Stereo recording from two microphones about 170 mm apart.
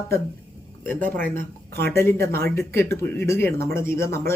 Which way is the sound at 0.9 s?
10° left (ahead or behind).